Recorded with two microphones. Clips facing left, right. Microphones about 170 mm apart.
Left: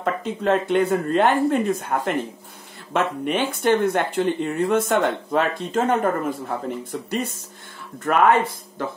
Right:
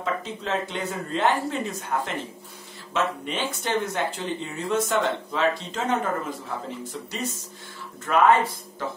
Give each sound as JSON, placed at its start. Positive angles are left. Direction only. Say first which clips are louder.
{"t": 0.0, "sound": "speech", "louder": "left 6 dB", "side_deg": 55}